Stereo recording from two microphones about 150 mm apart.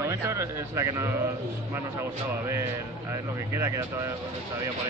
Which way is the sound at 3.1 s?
15° right (ahead or behind).